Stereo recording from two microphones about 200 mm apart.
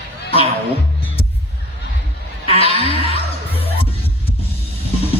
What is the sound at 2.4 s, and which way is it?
Music, 30° left (ahead or behind).